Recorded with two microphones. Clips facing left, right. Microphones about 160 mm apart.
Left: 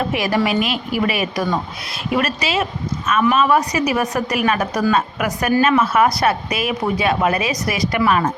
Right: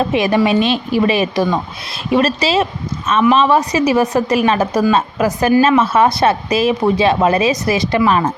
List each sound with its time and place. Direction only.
0.0 s speech: 25° right (ahead or behind)